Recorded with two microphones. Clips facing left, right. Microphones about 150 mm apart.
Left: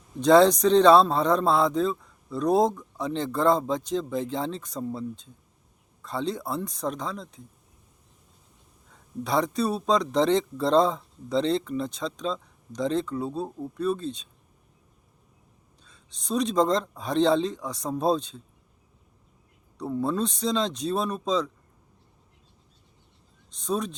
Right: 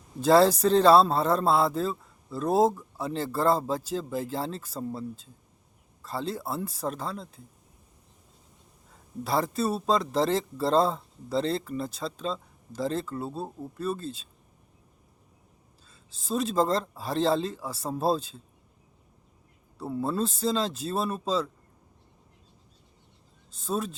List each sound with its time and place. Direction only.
0.2 s a man's voice: 5° right (ahead or behind)
9.2 s a man's voice: 5° right (ahead or behind)
15.9 s a man's voice: 5° right (ahead or behind)
19.8 s a man's voice: 5° right (ahead or behind)
23.5 s a man's voice: 5° right (ahead or behind)